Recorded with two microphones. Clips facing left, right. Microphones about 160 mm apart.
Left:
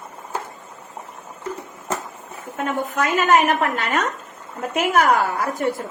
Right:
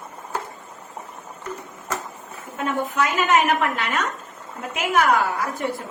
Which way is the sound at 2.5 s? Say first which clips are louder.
Even; 45° left (ahead or behind).